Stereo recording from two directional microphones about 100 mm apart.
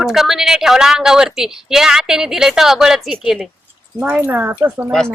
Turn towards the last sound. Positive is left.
turn(degrees=-20)  # may be behind; listen again after turning